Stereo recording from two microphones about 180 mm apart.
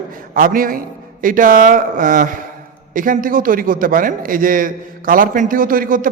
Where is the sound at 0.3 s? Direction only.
50° right (ahead or behind).